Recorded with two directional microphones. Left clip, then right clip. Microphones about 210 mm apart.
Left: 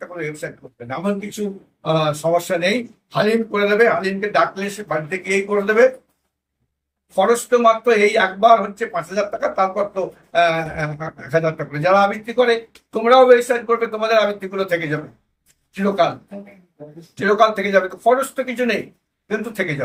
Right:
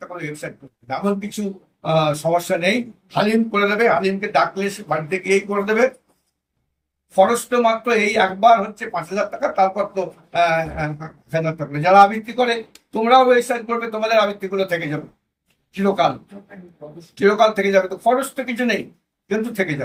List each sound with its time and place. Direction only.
0.0 s speech: 15° left (ahead or behind)
1.8 s speech: 15° left (ahead or behind)
7.2 s speech: 15° left (ahead or behind)
17.2 s speech: 15° left (ahead or behind)